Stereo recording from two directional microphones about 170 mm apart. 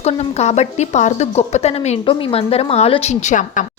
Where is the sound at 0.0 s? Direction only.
40° left (ahead or behind).